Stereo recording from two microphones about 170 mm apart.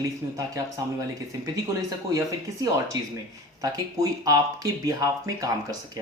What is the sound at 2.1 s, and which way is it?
Speech, 20° right (ahead or behind).